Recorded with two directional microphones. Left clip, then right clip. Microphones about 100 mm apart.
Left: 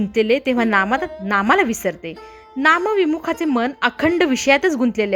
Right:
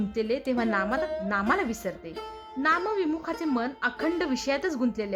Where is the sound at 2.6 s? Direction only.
45° left (ahead or behind).